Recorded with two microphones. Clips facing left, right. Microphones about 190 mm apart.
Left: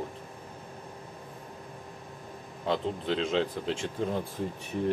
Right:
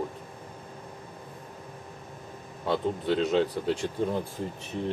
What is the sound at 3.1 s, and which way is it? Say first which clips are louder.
Speech: right 4 dB; 40° right (ahead or behind).